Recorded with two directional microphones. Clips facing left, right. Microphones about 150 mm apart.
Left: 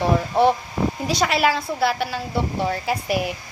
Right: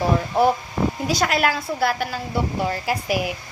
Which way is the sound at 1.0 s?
Centre (ahead or behind).